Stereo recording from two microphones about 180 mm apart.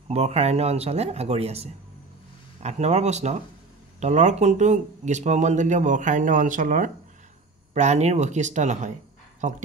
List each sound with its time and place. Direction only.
0.1 s speech: 35° right (ahead or behind)